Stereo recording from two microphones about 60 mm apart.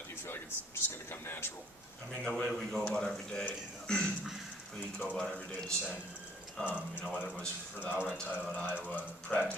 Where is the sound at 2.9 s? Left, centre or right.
Centre.